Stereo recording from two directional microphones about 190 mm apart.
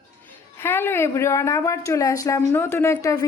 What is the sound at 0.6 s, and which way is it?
A woman's voice, 10° left (ahead or behind).